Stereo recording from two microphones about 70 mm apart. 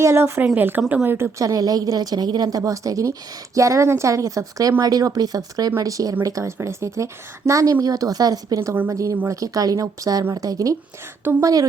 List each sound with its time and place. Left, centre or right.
0.0 s a woman's voice: right
1.0 s a woman's voice: right
1.5 s a woman's voice: right
4.8 s a woman's voice: right